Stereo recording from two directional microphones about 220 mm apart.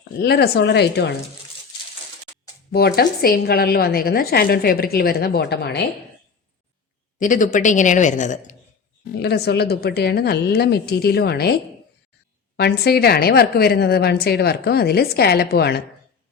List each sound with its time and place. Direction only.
0.2 s a woman's voice: 45° left (ahead or behind)
2.7 s a woman's voice: 45° left (ahead or behind)
7.2 s a woman's voice: 35° left (ahead or behind)
9.1 s a woman's voice: 50° left (ahead or behind)
12.5 s a woman's voice: 45° left (ahead or behind)